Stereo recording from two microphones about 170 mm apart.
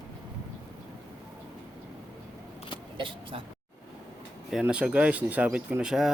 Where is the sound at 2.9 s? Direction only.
30° right (ahead or behind).